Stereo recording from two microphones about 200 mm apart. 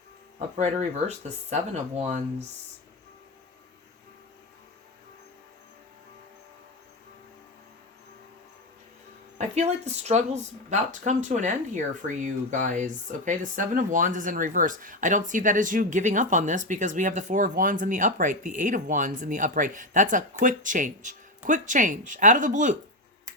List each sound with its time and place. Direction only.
0.3 s speech: 35° right (ahead or behind)
9.6 s speech: 35° right (ahead or behind)